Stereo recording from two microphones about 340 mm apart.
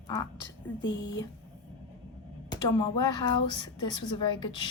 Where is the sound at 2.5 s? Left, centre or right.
Centre.